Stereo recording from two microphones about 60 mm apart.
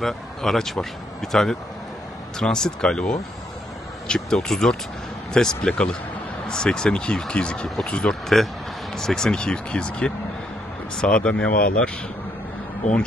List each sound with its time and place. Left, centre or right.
0.0 s speech: centre